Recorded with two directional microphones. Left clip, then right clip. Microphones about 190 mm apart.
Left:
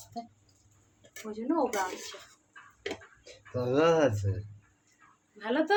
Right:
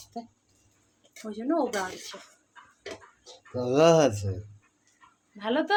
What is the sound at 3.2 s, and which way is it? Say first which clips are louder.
Speech: right 2 dB; 10° right (ahead or behind).